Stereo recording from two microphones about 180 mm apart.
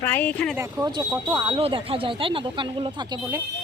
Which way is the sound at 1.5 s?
30° right (ahead or behind).